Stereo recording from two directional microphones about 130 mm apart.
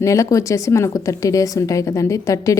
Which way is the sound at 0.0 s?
25° left (ahead or behind).